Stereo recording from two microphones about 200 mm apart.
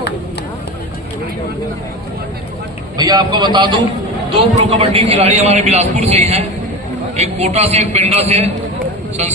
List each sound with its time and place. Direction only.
3.0 s a man's voice: 20° right (ahead or behind)